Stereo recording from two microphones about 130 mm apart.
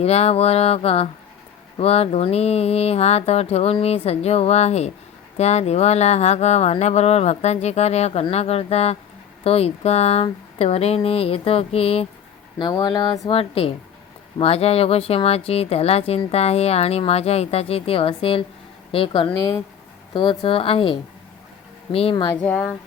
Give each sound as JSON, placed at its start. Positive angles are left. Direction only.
{"t": 0.0, "sound": "speech", "side_deg": 55}
{"t": 12.5, "sound": "speech", "side_deg": 35}
{"t": 22.4, "sound": "speech", "side_deg": 10}